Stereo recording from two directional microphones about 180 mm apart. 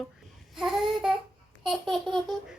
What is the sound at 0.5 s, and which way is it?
Babbling, centre (ahead or behind).